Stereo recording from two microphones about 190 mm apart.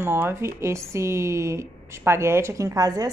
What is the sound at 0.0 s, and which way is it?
Speech, 15° right (ahead or behind).